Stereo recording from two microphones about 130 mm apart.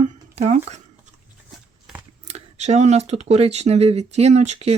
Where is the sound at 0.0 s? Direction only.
55° right (ahead or behind).